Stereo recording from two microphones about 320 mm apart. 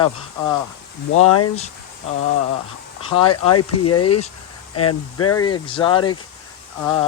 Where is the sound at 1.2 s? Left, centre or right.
Left.